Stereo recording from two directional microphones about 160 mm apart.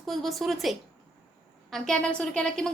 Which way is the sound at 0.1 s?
Centre (ahead or behind).